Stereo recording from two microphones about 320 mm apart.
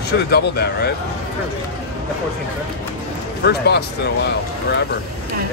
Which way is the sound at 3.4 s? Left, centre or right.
Left.